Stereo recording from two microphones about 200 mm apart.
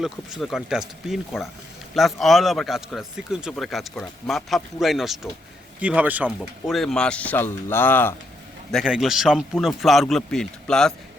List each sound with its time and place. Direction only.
0.0 s speech: centre (ahead or behind)
8.7 s speech: centre (ahead or behind)